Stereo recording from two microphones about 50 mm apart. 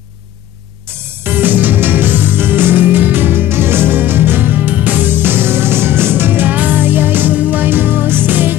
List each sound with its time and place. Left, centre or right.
1.2 s music: right